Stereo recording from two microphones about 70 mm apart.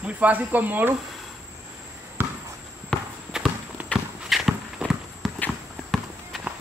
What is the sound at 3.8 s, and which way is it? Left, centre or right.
Clip-clop, right.